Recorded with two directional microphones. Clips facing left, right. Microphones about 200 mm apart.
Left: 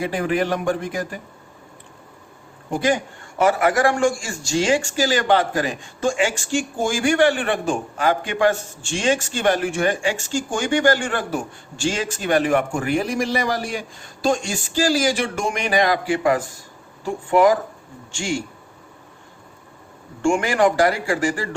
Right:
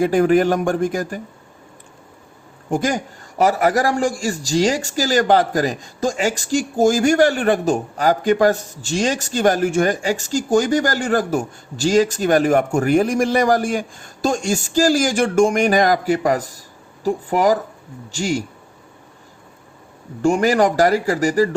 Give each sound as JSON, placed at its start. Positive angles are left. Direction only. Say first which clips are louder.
{"t": 0.0, "sound": "a man's voice", "louder": "right 7 dB", "side_deg": -45}
{"t": 2.6, "sound": "a man's voice", "louder": "even", "side_deg": -45}
{"t": 20.2, "sound": "a man's voice", "louder": "right 2 dB", "side_deg": -40}